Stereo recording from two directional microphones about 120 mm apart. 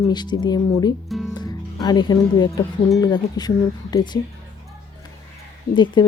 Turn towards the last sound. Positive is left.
turn(degrees=40)  # may be behind; listen again after turning